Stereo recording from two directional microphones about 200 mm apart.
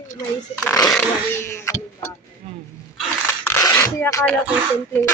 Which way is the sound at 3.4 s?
15° left (ahead or behind).